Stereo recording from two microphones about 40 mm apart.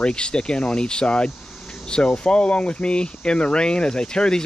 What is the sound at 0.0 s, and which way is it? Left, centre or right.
Speech, left.